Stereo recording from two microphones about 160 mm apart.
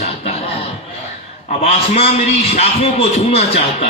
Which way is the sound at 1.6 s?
40° left (ahead or behind).